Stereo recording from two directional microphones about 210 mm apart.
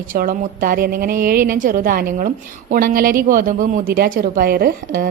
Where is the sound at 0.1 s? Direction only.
45° right (ahead or behind).